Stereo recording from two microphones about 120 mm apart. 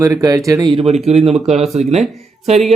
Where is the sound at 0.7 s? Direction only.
60° right (ahead or behind).